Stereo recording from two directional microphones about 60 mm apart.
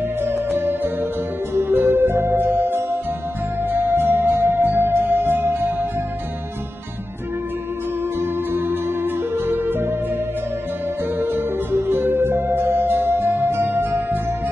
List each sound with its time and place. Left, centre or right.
0.2 s music: right
8.2 s music: right
11.1 s music: right